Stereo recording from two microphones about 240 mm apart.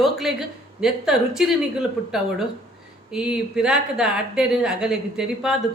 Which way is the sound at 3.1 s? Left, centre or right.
Centre.